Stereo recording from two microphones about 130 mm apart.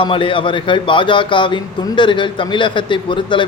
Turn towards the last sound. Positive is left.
turn(degrees=40)  # may be behind; listen again after turning